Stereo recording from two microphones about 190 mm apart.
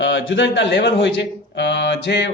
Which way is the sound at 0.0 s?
75° left (ahead or behind).